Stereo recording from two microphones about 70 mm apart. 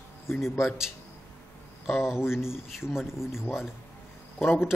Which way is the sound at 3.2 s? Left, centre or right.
Left.